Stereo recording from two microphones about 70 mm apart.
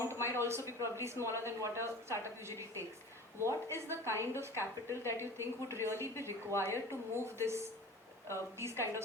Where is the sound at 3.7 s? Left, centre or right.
Right.